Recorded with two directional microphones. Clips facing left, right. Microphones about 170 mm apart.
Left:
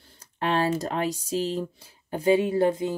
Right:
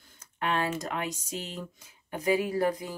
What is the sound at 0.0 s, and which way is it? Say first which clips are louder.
Speech: left 4 dB; 30° left (ahead or behind).